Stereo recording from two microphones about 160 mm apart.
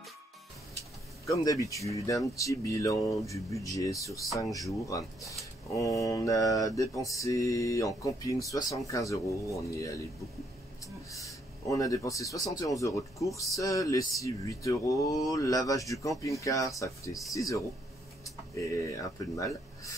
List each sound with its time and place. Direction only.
1.2 s mantra: 20° left (ahead or behind)
11.1 s speech: 20° left (ahead or behind)
13.2 s mantra: 20° left (ahead or behind)
18.9 s mantra: 20° left (ahead or behind)